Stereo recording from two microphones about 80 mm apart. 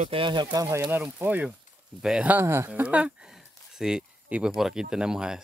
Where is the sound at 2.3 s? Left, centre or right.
Right.